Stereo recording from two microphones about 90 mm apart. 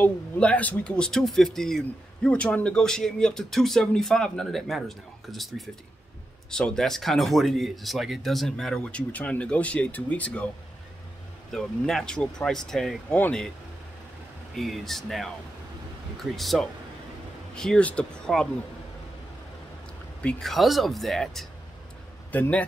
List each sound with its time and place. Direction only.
0.0 s speech: 15° left (ahead or behind)
11.5 s speech: 5° left (ahead or behind)
13.1 s speech: 15° left (ahead or behind)
14.5 s speech: centre (ahead or behind)
20.2 s speech: 10° left (ahead or behind)
22.3 s speech: 15° left (ahead or behind)